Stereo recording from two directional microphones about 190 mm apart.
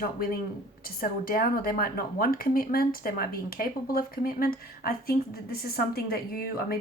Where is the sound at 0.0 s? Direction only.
50° left (ahead or behind).